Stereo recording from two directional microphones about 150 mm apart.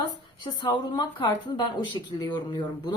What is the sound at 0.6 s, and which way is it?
Speech, 30° left (ahead or behind).